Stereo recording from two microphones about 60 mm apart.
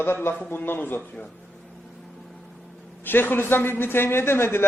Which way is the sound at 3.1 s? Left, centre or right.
Left.